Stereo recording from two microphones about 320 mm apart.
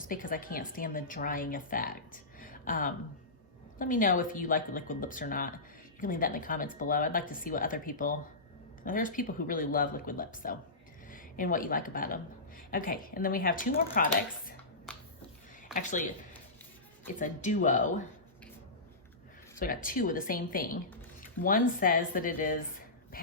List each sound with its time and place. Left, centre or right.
0.0 s a woman's voice: left
15.7 s a woman's voice: left
17.2 s a woman's voice: left
19.5 s a woman's voice: left